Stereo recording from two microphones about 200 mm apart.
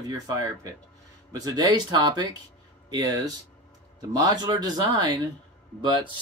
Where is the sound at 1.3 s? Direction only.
20° right (ahead or behind).